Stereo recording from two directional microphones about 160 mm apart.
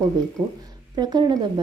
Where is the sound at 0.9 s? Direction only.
25° right (ahead or behind).